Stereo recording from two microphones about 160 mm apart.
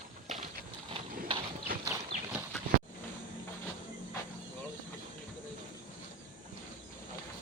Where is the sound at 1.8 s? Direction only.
15° right (ahead or behind).